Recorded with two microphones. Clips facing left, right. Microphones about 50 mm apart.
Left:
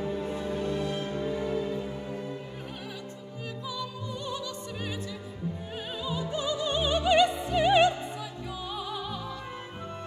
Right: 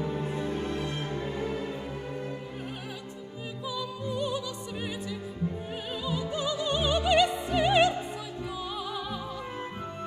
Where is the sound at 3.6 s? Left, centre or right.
Centre.